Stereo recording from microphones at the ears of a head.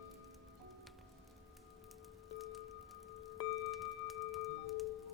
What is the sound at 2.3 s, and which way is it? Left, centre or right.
Music, left.